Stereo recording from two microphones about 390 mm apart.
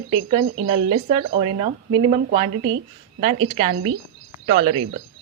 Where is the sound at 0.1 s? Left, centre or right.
Centre.